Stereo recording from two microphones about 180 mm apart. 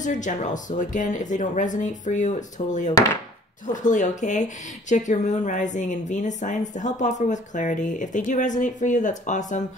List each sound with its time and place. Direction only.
0.0 s speech: 45° left (ahead or behind)